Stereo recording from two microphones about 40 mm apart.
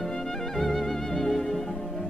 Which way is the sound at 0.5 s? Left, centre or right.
Centre.